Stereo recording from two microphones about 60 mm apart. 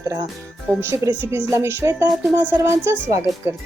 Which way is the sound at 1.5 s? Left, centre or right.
Right.